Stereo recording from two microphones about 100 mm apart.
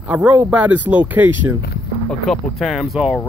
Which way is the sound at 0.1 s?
15° right (ahead or behind).